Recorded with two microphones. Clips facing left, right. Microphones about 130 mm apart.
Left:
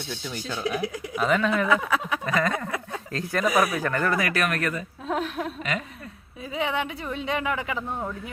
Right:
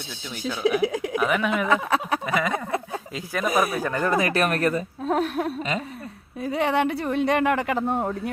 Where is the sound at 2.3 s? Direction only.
5° right (ahead or behind).